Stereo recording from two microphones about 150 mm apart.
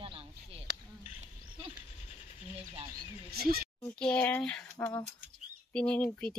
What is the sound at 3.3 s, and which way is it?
Speech, 90° right.